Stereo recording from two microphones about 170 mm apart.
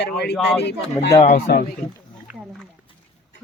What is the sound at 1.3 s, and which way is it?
Speech, 60° left (ahead or behind).